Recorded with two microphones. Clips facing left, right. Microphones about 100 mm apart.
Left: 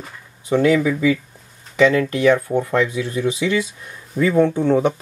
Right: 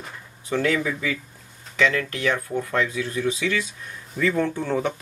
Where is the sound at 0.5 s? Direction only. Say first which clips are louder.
Left 7 dB; 15° left (ahead or behind).